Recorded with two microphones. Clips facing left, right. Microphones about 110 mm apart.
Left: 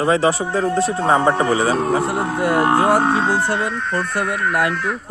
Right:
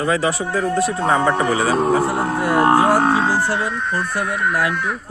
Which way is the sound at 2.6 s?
30° right (ahead or behind).